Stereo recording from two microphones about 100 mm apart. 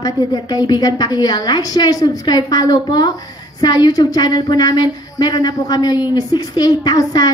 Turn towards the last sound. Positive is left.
turn(degrees=40)  # may be behind; listen again after turning